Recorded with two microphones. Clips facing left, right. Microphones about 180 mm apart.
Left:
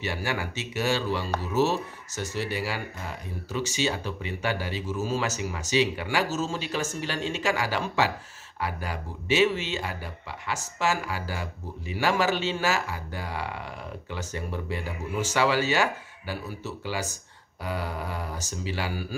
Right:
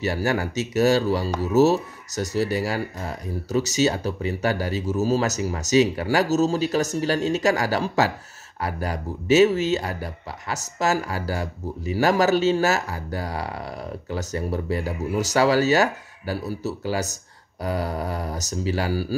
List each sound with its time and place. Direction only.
0.0 s speech: 40° right (ahead or behind)